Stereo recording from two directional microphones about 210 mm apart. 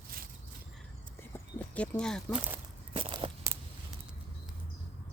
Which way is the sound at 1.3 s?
5° left (ahead or behind).